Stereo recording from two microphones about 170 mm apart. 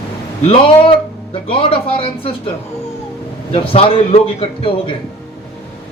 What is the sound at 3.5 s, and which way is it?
A man's voice, 30° left (ahead or behind).